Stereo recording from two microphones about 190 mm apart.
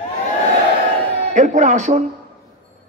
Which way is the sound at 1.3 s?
45° right (ahead or behind).